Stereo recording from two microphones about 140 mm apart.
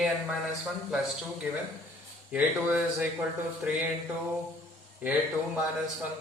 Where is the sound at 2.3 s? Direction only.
10° right (ahead or behind).